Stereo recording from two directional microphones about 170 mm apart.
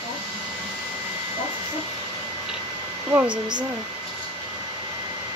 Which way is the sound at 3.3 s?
25° right (ahead or behind).